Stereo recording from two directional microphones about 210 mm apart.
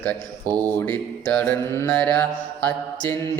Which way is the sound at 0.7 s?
10° left (ahead or behind).